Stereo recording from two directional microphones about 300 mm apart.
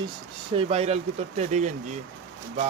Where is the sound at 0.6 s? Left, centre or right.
Centre.